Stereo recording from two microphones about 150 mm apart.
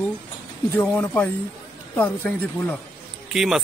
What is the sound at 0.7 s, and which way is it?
A man's voice, 10° left (ahead or behind).